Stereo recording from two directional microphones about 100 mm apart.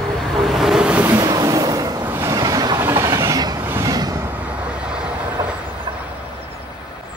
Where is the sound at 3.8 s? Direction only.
40° right (ahead or behind).